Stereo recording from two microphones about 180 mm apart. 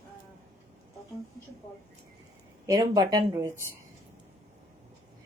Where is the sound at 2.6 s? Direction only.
20° right (ahead or behind).